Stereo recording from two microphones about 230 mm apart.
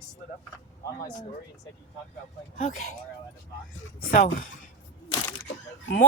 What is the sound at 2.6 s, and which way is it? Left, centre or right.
Speech, left.